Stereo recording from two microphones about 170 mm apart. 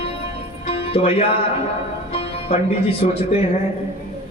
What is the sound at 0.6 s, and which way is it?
Music, 35° left (ahead or behind).